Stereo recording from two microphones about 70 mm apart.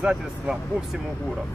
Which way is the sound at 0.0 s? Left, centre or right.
Centre.